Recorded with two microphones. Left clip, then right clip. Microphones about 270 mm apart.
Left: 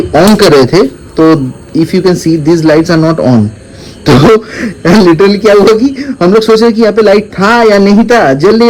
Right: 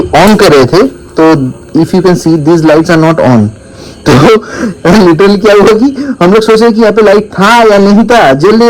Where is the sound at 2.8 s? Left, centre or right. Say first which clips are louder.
Right 3 dB; right.